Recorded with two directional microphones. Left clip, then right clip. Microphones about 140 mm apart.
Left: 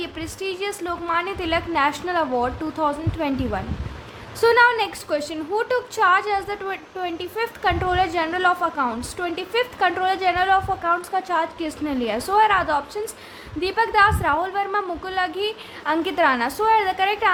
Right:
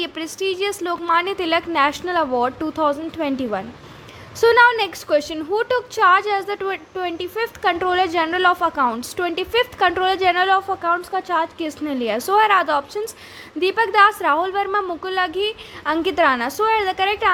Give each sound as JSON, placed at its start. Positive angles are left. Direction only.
{"t": 0.0, "sound": "a woman's voice", "side_deg": -35}